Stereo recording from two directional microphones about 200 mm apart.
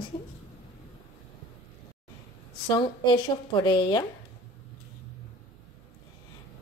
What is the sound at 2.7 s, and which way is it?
Speech, 25° left (ahead or behind).